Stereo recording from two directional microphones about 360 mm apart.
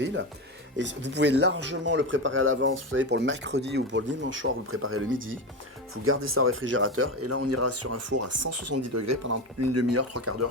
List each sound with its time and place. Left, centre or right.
0.0 s speech: right